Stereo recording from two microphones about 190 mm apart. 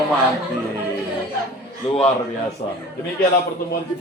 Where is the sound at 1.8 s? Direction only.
35° left (ahead or behind).